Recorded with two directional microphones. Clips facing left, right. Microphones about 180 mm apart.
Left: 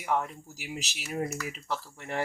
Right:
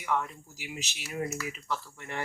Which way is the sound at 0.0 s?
40° left (ahead or behind).